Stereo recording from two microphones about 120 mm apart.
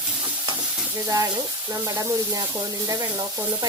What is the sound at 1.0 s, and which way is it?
Speech, 30° right (ahead or behind).